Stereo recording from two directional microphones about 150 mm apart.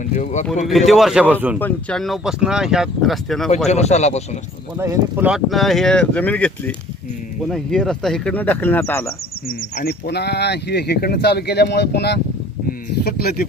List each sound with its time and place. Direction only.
0.0 s speech: 55° left (ahead or behind)
0.7 s speech: centre (ahead or behind)
1.5 s speech: 10° left (ahead or behind)
3.7 s speech: 50° left (ahead or behind)
4.8 s speech: 15° right (ahead or behind)
5.5 s speech: centre (ahead or behind)
9.5 s speech: 80° left